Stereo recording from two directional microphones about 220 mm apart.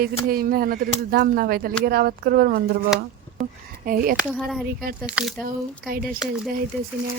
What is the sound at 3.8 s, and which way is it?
Speech, 40° right (ahead or behind).